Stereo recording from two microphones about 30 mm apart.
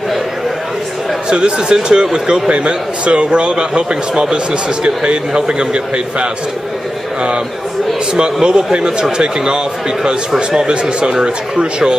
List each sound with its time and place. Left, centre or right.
1.3 s speech: right
2.5 s a man's voice: right
8.1 s speech: right
10.7 s speech: right